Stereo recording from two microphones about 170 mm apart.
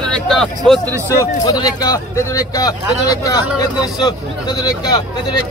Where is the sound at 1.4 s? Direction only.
20° left (ahead or behind).